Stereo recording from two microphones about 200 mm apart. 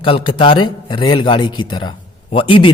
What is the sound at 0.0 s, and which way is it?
A man's voice, 25° left (ahead or behind).